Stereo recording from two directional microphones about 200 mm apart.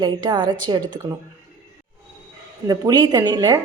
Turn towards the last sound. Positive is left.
turn(degrees=-20)  # may be behind; listen again after turning